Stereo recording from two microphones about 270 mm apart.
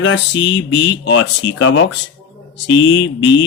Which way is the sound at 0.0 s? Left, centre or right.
Left.